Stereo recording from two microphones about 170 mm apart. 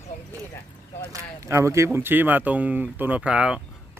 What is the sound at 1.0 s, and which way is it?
Speech, 20° right (ahead or behind).